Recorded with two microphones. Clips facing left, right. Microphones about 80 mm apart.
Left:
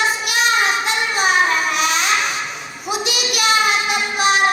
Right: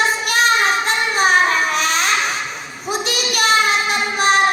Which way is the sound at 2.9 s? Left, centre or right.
Right.